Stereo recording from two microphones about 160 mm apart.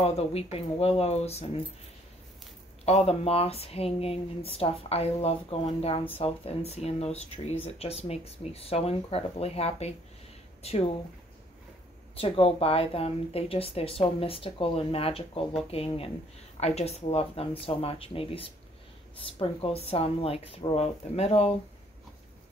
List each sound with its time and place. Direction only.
0.0 s speech: 40° left (ahead or behind)
2.8 s speech: 40° left (ahead or behind)
12.2 s speech: 35° left (ahead or behind)